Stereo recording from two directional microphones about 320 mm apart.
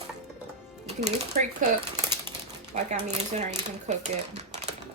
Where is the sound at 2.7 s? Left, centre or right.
Right.